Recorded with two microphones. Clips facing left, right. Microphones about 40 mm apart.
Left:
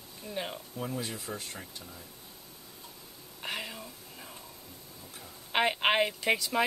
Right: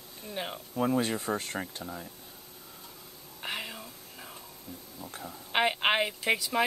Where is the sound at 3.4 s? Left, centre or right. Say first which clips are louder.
Right 1 dB; centre.